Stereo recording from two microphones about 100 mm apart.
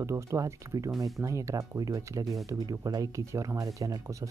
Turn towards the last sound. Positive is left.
turn(degrees=-35)  # may be behind; listen again after turning